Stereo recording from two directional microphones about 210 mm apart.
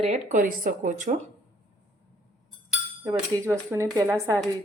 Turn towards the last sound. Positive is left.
turn(degrees=-15)  # may be behind; listen again after turning